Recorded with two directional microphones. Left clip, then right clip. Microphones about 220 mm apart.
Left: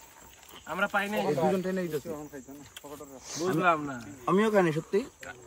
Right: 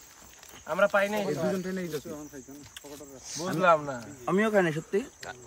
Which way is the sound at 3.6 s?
10° right (ahead or behind).